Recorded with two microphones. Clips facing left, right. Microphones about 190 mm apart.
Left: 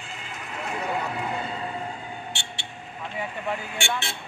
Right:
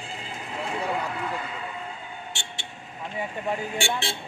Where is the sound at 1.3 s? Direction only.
30° left (ahead or behind).